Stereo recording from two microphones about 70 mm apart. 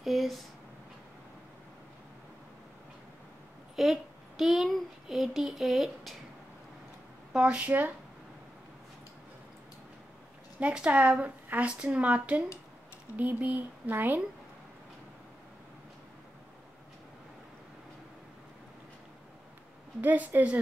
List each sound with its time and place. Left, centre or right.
0.0 s a child's voice: centre
3.7 s a child's voice: centre
7.3 s a woman's voice: centre
10.6 s a woman's voice: centre
20.0 s a woman's voice: right